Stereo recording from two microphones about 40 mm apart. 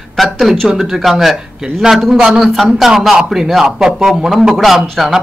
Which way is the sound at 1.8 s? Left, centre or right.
Centre.